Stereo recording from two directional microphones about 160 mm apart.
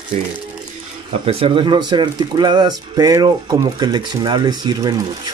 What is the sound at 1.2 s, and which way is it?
Speech, 35° right (ahead or behind).